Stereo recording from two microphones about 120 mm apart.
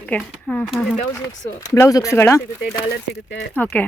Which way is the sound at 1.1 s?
25° left (ahead or behind).